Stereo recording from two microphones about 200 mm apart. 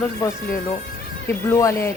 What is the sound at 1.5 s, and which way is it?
Speech, 15° left (ahead or behind).